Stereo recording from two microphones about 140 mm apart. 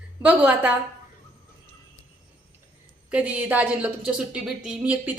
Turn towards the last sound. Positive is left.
turn(degrees=-10)  # may be behind; listen again after turning